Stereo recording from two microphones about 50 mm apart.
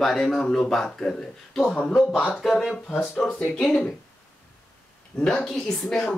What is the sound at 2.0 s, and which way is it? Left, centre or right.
Speech, centre.